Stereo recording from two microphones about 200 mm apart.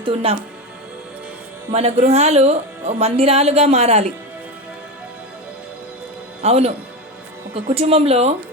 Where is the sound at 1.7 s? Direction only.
30° right (ahead or behind).